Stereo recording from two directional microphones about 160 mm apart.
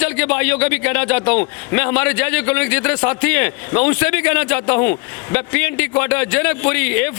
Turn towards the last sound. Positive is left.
turn(degrees=10)  # may be behind; listen again after turning